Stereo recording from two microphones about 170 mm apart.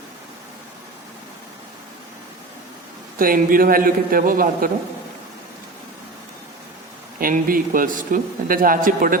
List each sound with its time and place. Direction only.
3.2 s a man's voice: 55° right (ahead or behind)
7.2 s a man's voice: 55° right (ahead or behind)